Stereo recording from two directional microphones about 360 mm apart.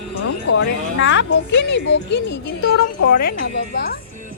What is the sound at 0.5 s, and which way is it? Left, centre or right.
Speech, left.